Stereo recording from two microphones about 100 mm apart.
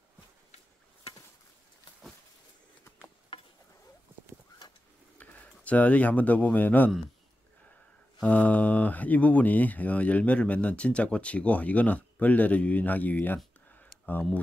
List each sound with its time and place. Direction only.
5.2 s speech: 15° left (ahead or behind)
8.2 s speech: 15° left (ahead or behind)